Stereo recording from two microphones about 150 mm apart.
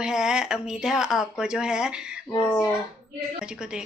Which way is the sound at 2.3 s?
15° left (ahead or behind).